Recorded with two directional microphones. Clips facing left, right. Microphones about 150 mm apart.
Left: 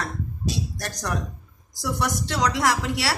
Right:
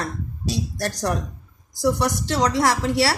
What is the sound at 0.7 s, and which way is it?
A woman's voice, 30° right (ahead or behind).